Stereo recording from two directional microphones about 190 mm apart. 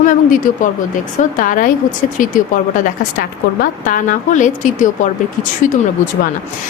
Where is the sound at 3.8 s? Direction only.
45° left (ahead or behind).